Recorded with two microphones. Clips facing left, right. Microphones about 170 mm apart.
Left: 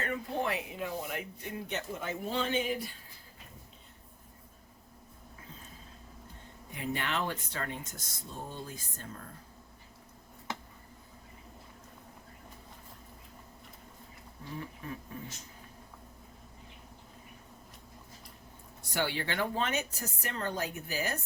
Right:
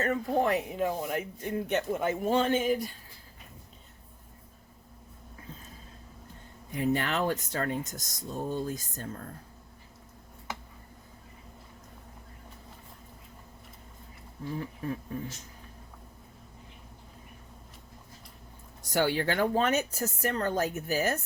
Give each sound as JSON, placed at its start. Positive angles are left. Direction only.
{"t": 0.0, "sound": "speech", "side_deg": -45}
{"t": 6.7, "sound": "speech", "side_deg": -45}
{"t": 18.8, "sound": "speech", "side_deg": -40}